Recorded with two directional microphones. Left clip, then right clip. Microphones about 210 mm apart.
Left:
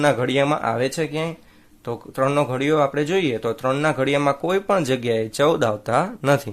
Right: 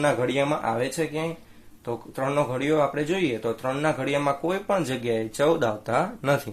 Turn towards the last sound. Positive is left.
turn(degrees=40)  # may be behind; listen again after turning